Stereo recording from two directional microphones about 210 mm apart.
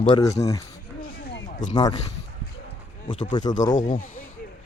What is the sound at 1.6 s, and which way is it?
Speech, 35° left (ahead or behind).